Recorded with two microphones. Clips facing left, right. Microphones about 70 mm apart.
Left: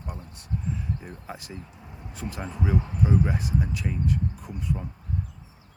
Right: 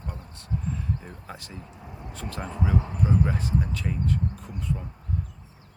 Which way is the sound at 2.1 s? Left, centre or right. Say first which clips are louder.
Even; centre.